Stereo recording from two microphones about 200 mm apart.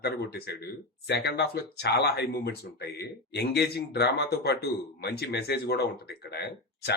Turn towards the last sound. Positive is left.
turn(degrees=55)  # may be behind; listen again after turning